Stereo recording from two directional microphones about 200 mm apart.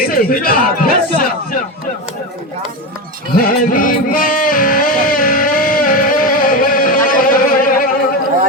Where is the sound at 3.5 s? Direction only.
45° left (ahead or behind).